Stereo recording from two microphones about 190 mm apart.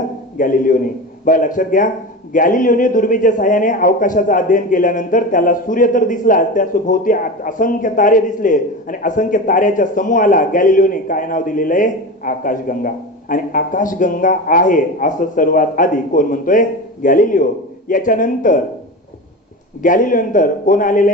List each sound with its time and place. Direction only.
0.3 s a man's voice: 45° left (ahead or behind)
19.8 s a man's voice: 45° left (ahead or behind)